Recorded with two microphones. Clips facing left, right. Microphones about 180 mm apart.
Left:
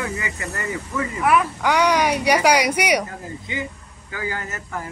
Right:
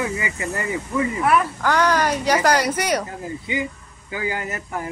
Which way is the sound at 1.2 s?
10° left (ahead or behind).